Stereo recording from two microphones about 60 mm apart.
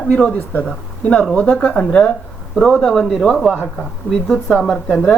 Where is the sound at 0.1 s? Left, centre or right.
Left.